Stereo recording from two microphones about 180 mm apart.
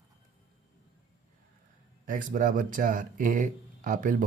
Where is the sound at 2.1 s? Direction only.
50° right (ahead or behind).